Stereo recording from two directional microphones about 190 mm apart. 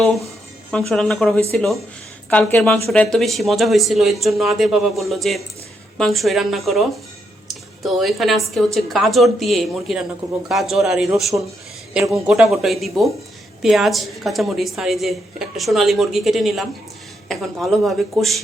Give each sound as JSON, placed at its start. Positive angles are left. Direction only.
{"t": 0.0, "sound": "a woman's voice", "side_deg": 0}
{"t": 7.9, "sound": "a woman's voice", "side_deg": 0}